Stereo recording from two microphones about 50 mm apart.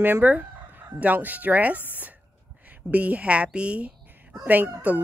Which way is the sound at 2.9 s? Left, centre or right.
Right.